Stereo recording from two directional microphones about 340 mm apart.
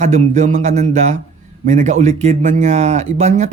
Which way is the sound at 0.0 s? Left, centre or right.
Right.